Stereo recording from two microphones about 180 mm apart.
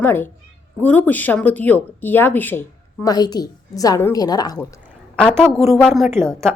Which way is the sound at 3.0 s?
20° left (ahead or behind).